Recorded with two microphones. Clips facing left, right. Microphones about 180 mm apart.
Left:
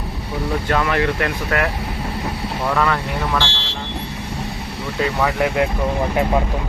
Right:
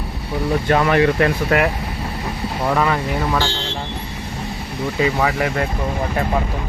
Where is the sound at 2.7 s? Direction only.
15° right (ahead or behind).